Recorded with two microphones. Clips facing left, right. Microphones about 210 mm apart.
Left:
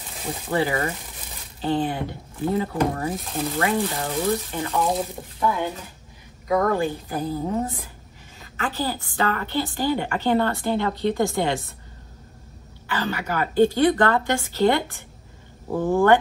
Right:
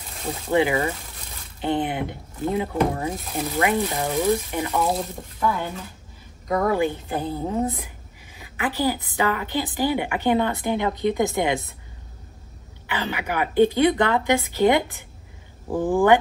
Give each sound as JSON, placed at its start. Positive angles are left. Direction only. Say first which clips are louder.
{"t": 0.5, "sound": "a woman's voice", "louder": "right 3 dB", "side_deg": -15}
{"t": 4.7, "sound": "speech", "louder": "left 1 dB", "side_deg": 0}
{"t": 6.4, "sound": "speech", "louder": "left 1 dB", "side_deg": 0}
{"t": 7.1, "sound": "a woman's voice", "louder": "even", "side_deg": -25}
{"t": 8.4, "sound": "a woman's voice", "louder": "right 2 dB", "side_deg": -15}
{"t": 12.8, "sound": "a woman's voice", "louder": "left 1 dB", "side_deg": -20}